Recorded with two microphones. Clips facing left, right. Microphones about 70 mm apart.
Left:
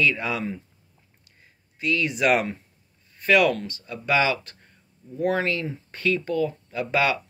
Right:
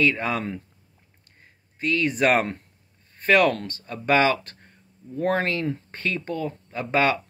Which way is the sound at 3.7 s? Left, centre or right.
Right.